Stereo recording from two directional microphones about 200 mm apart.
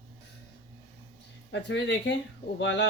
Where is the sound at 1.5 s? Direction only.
60° left (ahead or behind).